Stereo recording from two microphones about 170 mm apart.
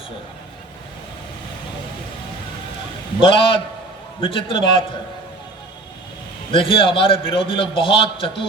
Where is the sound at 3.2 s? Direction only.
30° left (ahead or behind).